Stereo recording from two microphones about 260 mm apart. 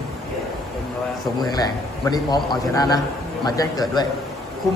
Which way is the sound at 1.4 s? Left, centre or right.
Centre.